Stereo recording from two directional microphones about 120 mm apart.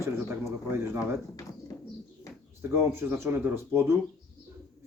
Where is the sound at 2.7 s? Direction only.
20° right (ahead or behind).